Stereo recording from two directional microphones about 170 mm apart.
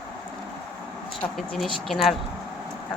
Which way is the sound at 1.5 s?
5° left (ahead or behind).